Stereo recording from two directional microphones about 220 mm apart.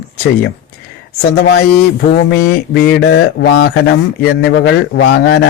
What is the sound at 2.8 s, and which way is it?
Mantra, 50° left (ahead or behind).